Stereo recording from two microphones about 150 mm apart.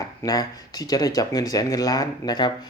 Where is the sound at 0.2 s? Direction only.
25° left (ahead or behind).